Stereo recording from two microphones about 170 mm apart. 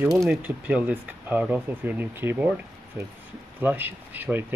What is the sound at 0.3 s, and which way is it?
Speech, 10° right (ahead or behind).